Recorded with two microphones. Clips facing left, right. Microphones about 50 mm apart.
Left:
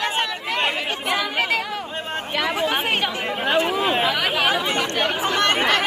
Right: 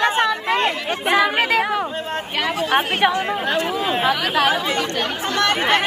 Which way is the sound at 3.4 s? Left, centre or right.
Centre.